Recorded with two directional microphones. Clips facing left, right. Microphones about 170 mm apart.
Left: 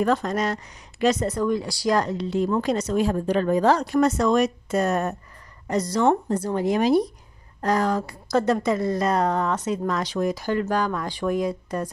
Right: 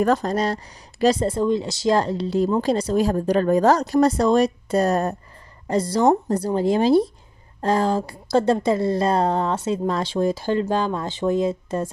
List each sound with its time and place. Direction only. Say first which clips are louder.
0.0 s speech: right 2 dB; 40° right (ahead or behind)